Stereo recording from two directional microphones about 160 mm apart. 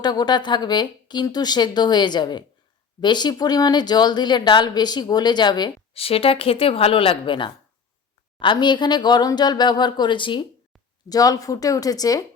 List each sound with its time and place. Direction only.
0.0 s speech: 25° left (ahead or behind)